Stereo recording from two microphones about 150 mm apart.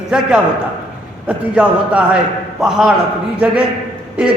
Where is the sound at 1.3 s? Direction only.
10° right (ahead or behind).